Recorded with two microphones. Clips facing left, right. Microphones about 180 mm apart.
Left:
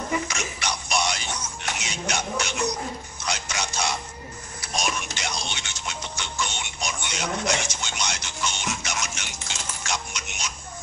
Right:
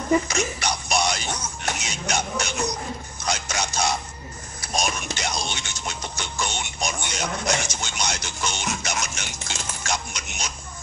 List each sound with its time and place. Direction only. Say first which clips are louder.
0.3 s music: right 5 dB; 40° right (ahead or behind)
1.8 s a sound: even; 40° right (ahead or behind)
4.7 s music: right 2 dB; 40° right (ahead or behind)